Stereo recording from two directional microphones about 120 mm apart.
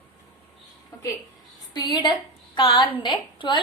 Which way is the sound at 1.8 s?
35° left (ahead or behind).